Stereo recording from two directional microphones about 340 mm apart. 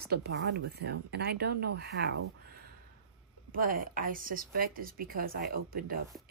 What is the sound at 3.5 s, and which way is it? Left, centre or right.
Speech, right.